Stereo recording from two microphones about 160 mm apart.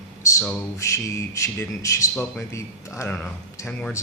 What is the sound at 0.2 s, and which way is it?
Speech, 20° left (ahead or behind).